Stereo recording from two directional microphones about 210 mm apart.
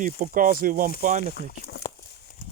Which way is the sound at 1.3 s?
45° left (ahead or behind).